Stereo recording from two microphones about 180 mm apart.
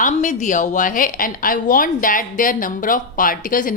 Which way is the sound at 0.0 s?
45° left (ahead or behind).